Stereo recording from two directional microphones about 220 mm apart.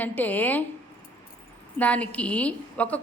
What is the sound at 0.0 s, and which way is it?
Speech, 10° left (ahead or behind).